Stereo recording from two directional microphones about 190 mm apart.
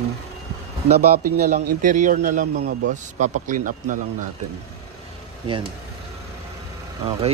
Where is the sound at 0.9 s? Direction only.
55° right (ahead or behind).